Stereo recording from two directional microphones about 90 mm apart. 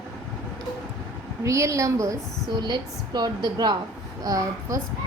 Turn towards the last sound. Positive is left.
turn(degrees=-40)  # may be behind; listen again after turning